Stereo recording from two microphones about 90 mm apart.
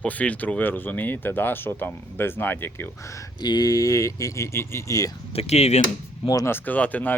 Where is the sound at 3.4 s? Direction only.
50° left (ahead or behind).